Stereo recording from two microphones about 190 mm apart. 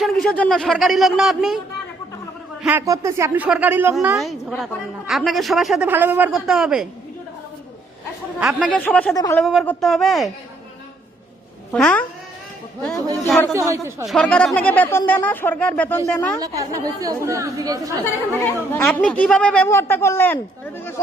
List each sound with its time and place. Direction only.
0.0 s a man's voice: centre (ahead or behind)
2.6 s a man's voice: 15° right (ahead or behind)
8.4 s a man's voice: centre (ahead or behind)
9.1 s speech: 20° left (ahead or behind)
9.4 s a man's voice: centre (ahead or behind)
11.7 s a man's voice: 5° left (ahead or behind)
13.1 s a man's voice: centre (ahead or behind)
13.5 s speech: 15° right (ahead or behind)
14.0 s speech: centre (ahead or behind)
16.4 s speech: 20° right (ahead or behind)
18.9 s a man's voice: 5° left (ahead or behind)